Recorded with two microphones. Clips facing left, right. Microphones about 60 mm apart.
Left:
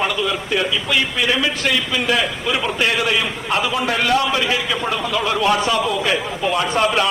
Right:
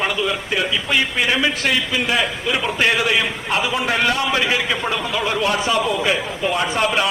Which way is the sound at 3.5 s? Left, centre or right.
Centre.